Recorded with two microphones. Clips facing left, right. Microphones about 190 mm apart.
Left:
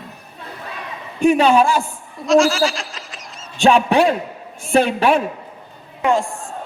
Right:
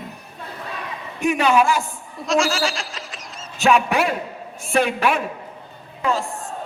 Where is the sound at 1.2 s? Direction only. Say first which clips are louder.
Left 5 dB; 30° left (ahead or behind).